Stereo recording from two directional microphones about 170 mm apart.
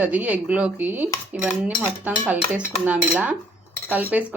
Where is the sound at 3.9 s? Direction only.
10° right (ahead or behind).